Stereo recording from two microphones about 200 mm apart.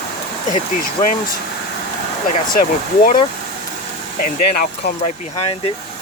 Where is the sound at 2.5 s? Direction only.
45° left (ahead or behind).